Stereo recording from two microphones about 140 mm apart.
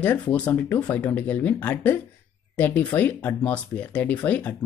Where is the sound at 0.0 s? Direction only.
10° left (ahead or behind).